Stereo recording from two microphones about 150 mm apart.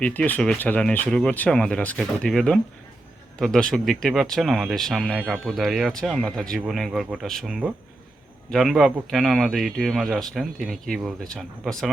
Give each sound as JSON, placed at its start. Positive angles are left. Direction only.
{"t": 0.0, "sound": "speech", "side_deg": 10}